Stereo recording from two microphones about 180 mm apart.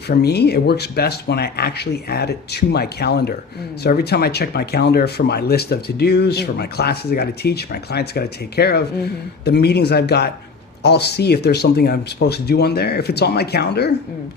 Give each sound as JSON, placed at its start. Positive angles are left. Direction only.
{"t": 0.1, "sound": "speech", "side_deg": 65}